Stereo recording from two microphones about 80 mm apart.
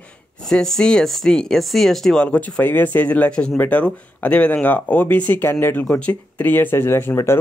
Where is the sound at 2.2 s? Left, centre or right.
Centre.